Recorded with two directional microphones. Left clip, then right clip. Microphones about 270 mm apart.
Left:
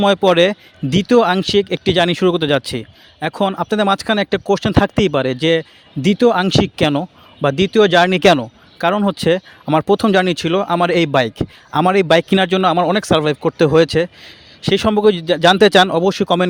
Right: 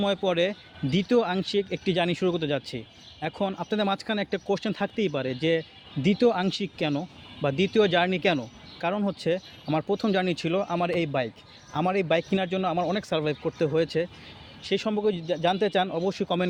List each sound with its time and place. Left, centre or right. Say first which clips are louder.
0.0 s speech: left 13 dB; left